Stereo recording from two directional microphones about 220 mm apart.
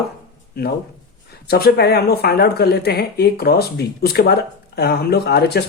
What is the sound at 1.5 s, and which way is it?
Speech, 45° left (ahead or behind).